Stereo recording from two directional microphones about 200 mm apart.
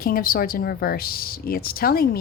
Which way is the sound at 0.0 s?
45° left (ahead or behind).